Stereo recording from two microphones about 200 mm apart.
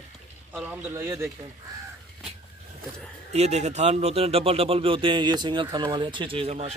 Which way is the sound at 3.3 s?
35° right (ahead or behind).